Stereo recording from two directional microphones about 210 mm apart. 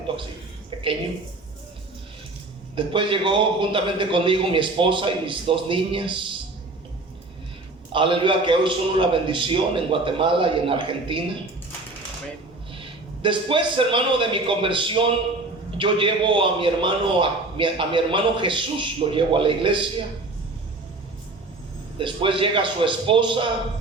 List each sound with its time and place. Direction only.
2.7 s a man's voice: 25° right (ahead or behind)
7.9 s a man's voice: 25° right (ahead or behind)
12.7 s a man's voice: 25° right (ahead or behind)
21.9 s a man's voice: 25° right (ahead or behind)